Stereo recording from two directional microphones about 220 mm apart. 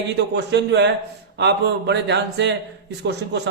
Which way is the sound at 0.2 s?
50° right (ahead or behind).